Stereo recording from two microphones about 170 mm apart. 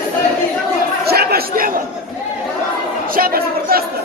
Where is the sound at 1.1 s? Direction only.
65° right (ahead or behind).